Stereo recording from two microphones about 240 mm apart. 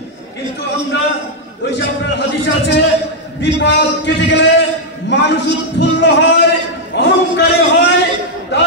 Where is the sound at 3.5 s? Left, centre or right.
Left.